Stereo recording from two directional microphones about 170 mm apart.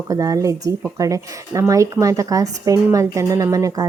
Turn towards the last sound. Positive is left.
turn(degrees=-20)  # may be behind; listen again after turning